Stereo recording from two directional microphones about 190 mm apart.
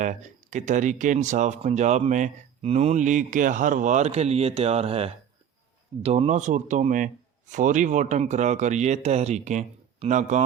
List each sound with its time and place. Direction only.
0.0 s speech: 40° right (ahead or behind)